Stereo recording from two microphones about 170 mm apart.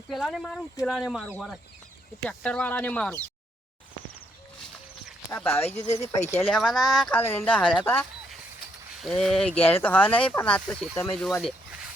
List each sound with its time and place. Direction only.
0.1 s speech: centre (ahead or behind)
2.2 s speech: 10° left (ahead or behind)
5.3 s speech: 15° left (ahead or behind)
5.6 s speech: 40° left (ahead or behind)
6.1 s speech: 15° left (ahead or behind)
6.5 s speech: centre (ahead or behind)
9.0 s speech: centre (ahead or behind)